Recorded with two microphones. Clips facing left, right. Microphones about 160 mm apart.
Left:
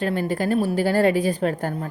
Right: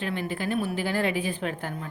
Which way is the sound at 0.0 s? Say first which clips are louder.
Left 7 dB; 40° left (ahead or behind).